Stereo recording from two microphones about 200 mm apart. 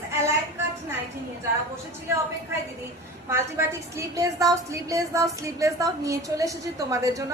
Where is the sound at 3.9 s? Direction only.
15° right (ahead or behind).